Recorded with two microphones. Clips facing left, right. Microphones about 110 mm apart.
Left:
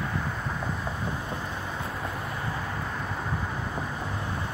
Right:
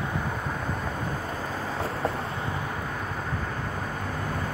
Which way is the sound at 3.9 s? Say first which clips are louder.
Right 2 dB; 50° right (ahead or behind).